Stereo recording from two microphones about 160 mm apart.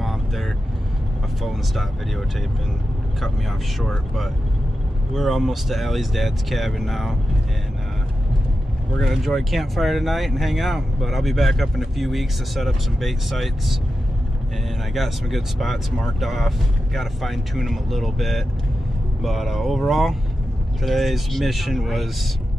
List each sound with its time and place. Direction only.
0.0 s vehicle: centre (ahead or behind)
1.4 s speech: centre (ahead or behind)
3.8 s speech: centre (ahead or behind)
8.9 s speech: centre (ahead or behind)
15.0 s speech: centre (ahead or behind)